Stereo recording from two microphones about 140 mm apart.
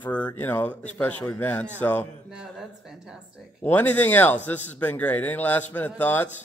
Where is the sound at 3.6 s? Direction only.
15° left (ahead or behind).